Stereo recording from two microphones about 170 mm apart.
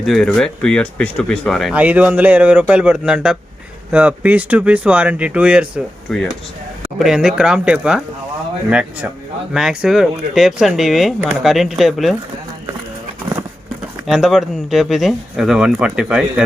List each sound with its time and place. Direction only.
0.0 s speech: centre (ahead or behind)
14.1 s speech: centre (ahead or behind)